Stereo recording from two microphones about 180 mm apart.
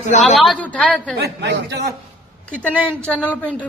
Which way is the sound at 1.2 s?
65° right (ahead or behind).